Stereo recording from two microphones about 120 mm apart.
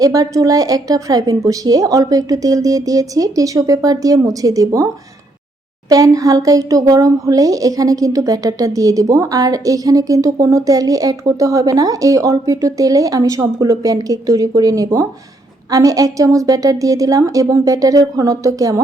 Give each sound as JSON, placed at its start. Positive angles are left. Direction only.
{"t": 0.0, "sound": "speech", "side_deg": -30}
{"t": 5.9, "sound": "speech", "side_deg": -30}